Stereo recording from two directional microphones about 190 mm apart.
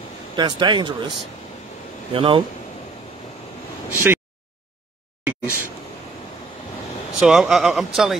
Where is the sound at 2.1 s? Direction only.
30° right (ahead or behind).